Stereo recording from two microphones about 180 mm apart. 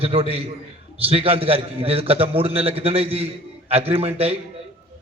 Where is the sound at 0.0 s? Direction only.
30° right (ahead or behind).